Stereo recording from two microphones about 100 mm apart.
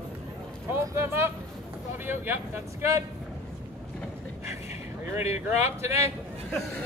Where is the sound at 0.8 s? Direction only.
25° right (ahead or behind).